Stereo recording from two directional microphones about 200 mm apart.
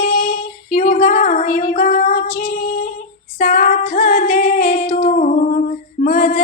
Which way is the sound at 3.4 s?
40° left (ahead or behind).